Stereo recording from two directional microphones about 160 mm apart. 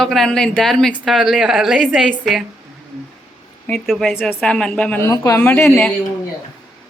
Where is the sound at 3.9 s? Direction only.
Centre (ahead or behind).